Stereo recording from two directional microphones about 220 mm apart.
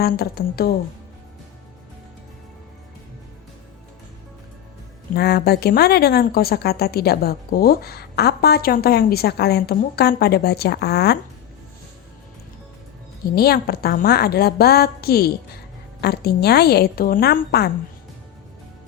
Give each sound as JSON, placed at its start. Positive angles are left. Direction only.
{"t": 0.0, "sound": "a woman's voice", "side_deg": 45}
{"t": 5.1, "sound": "a woman's voice", "side_deg": 45}
{"t": 13.3, "sound": "a woman's voice", "side_deg": 45}